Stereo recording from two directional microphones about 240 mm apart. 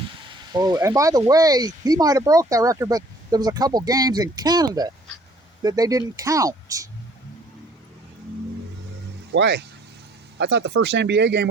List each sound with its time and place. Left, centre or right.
0.3 s speech: centre
9.3 s speech: right